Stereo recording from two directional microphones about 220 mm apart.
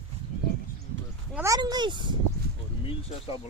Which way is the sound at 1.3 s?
10° right (ahead or behind).